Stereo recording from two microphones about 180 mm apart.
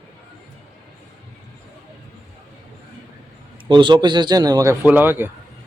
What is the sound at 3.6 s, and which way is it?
A man's voice, 25° right (ahead or behind).